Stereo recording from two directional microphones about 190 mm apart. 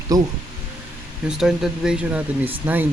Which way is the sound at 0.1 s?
20° right (ahead or behind).